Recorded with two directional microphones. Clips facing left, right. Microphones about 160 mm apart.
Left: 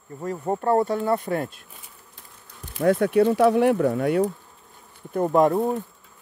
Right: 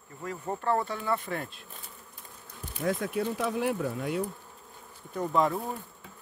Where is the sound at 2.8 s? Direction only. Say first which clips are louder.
Left 11 dB; 70° left (ahead or behind).